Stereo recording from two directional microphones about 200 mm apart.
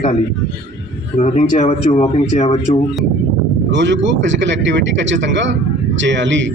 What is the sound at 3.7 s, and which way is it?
A man's voice, 65° right (ahead or behind).